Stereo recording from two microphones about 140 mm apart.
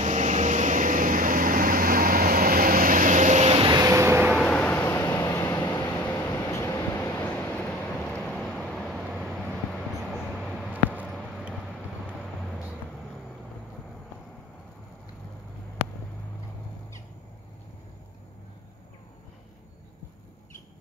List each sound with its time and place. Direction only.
0.0 s a sound: 60° right (ahead or behind)
3.6 s vehicle: 25° right (ahead or behind)
4.4 s vehicle: 10° left (ahead or behind)
12.2 s vehicle: 5° left (ahead or behind)